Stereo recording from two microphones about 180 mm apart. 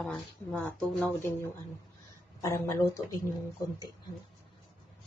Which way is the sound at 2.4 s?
15° left (ahead or behind).